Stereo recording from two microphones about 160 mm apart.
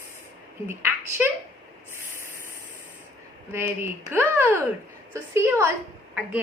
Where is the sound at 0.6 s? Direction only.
15° right (ahead or behind).